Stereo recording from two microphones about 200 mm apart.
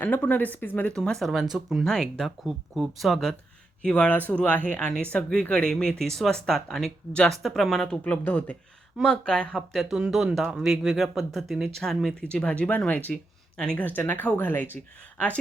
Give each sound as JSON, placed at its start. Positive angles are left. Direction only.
{"t": 0.0, "sound": "speech", "side_deg": 10}